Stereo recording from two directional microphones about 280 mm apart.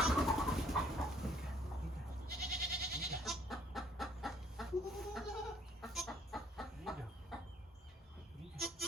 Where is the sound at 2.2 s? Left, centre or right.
Right.